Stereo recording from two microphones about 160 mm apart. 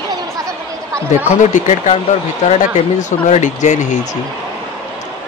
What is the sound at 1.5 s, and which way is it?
Speech, 45° left (ahead or behind).